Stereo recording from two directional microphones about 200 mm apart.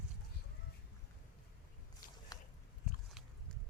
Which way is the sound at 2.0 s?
45° left (ahead or behind).